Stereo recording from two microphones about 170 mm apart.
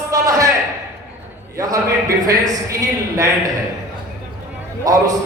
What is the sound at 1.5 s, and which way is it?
A man's voice, 20° right (ahead or behind).